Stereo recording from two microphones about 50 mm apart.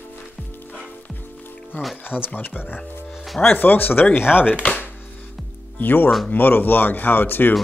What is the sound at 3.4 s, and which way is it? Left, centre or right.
Speech, left.